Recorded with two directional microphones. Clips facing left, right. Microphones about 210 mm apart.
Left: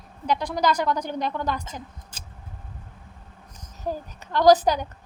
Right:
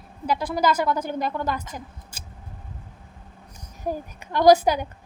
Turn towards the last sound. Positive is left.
turn(degrees=-10)  # may be behind; listen again after turning